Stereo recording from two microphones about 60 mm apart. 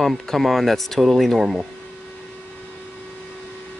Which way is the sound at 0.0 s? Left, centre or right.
Centre.